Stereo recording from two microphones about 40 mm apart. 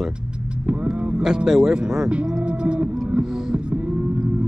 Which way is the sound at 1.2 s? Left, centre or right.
Centre.